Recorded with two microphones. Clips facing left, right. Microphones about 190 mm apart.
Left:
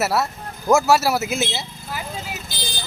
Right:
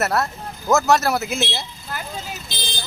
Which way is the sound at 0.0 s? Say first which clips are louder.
Even; 5° left (ahead or behind).